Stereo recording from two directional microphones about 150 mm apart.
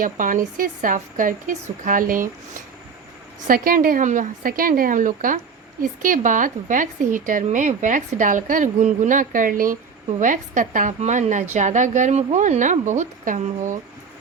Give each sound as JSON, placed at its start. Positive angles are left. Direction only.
{"t": 0.0, "sound": "a woman's voice", "side_deg": -65}